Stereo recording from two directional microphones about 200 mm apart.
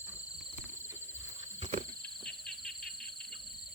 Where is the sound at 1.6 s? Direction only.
35° right (ahead or behind).